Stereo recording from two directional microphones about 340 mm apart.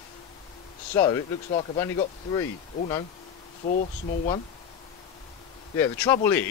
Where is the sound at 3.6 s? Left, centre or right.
Left.